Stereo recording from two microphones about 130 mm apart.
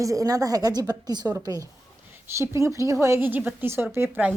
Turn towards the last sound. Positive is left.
turn(degrees=-15)  # may be behind; listen again after turning